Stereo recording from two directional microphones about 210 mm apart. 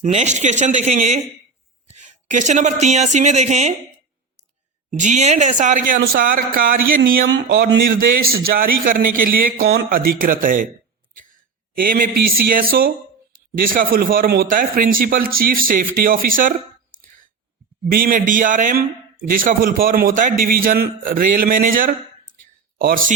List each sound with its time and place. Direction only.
0.0 s speech: 35° right (ahead or behind)
4.9 s a man's voice: 35° right (ahead or behind)
11.8 s a man's voice: 45° right (ahead or behind)